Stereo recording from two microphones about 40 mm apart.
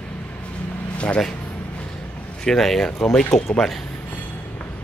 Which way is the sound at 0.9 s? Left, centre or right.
Left.